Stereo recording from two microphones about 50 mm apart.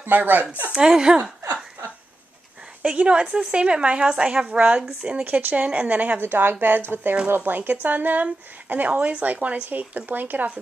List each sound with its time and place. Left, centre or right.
0.0 s speech: right
0.7 s a woman's voice: centre
2.8 s a woman's voice: right
4.5 s a woman's voice: right
6.2 s a woman's voice: right
7.5 s speech: right